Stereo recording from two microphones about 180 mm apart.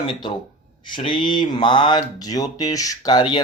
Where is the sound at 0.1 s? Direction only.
25° left (ahead or behind).